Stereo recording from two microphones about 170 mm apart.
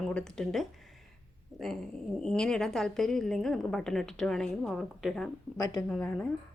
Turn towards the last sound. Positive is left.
turn(degrees=10)  # may be behind; listen again after turning